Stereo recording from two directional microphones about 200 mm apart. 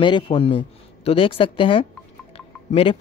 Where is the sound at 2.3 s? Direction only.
25° left (ahead or behind).